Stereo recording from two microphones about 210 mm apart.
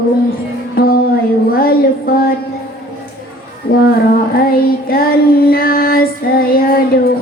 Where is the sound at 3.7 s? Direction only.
45° left (ahead or behind).